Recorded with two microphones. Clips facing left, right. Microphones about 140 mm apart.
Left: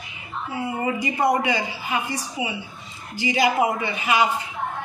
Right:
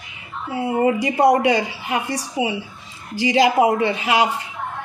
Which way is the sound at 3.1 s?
90° right.